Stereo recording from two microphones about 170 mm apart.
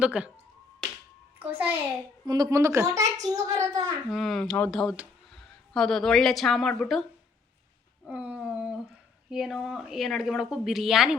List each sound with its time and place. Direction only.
0.0 s a woman's voice: 5° right (ahead or behind)
1.4 s a child's voice: 10° right (ahead or behind)
2.2 s a child's voice: 25° right (ahead or behind)
4.1 s a woman's voice: centre (ahead or behind)
8.0 s a sound: 10° right (ahead or behind)
9.3 s a woman's voice: centre (ahead or behind)